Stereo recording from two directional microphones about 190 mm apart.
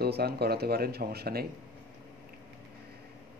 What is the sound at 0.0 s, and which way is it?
Speech, 55° right (ahead or behind).